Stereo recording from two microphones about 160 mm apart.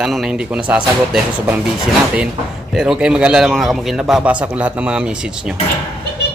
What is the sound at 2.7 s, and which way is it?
A man's voice, 5° right (ahead or behind).